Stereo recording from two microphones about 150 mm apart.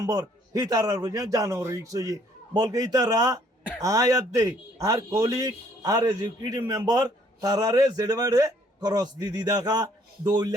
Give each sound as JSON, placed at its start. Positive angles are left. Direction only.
{"t": 0.0, "sound": "speech", "side_deg": -25}